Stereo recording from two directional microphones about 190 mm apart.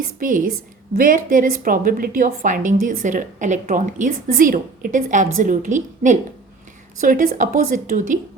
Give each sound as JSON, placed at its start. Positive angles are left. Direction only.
{"t": 0.2, "sound": "a woman's voice", "side_deg": -45}